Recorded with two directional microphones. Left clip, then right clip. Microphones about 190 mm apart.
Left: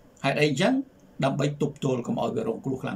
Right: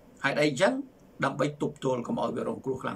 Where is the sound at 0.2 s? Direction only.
15° left (ahead or behind).